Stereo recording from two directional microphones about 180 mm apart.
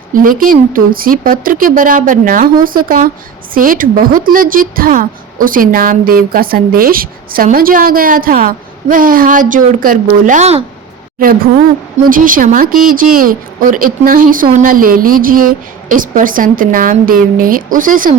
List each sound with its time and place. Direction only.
0.1 s a woman's voice: 50° right (ahead or behind)
12.0 s a woman's voice: 50° right (ahead or behind)